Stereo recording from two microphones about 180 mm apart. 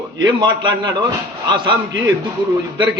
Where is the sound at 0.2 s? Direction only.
25° right (ahead or behind).